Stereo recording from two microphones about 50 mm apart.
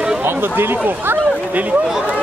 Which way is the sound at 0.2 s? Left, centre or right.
Right.